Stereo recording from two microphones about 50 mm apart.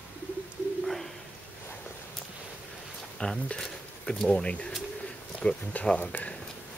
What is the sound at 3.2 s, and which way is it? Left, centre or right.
Speech, left.